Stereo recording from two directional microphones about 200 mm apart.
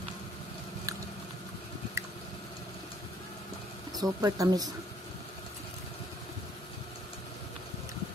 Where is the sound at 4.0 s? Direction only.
20° right (ahead or behind).